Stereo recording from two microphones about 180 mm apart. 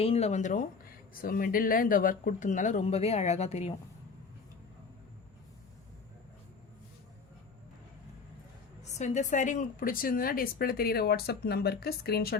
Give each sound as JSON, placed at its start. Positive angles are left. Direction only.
{"t": 0.0, "sound": "speech", "side_deg": 35}
{"t": 8.8, "sound": "a woman's voice", "side_deg": 40}